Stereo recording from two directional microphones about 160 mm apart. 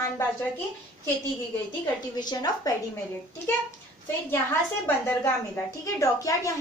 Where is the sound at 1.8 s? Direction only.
25° left (ahead or behind).